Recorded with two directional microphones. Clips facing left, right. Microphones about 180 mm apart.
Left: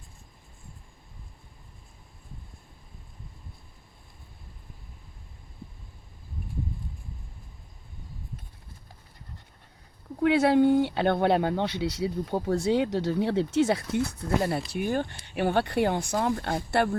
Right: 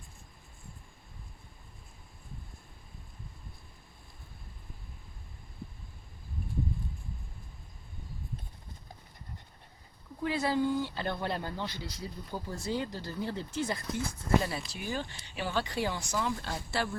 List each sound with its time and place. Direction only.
10.2 s speech: 75° left (ahead or behind); by 16.6 s 60° left (ahead or behind)